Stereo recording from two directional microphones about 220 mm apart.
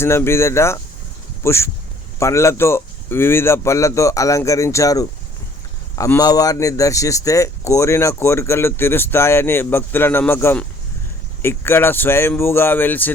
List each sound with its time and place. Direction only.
0.0 s speech: 10° left (ahead or behind)